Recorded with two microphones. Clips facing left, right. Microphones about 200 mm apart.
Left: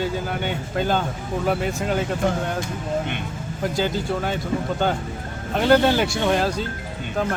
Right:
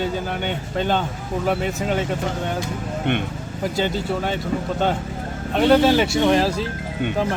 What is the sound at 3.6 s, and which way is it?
Speech, centre (ahead or behind).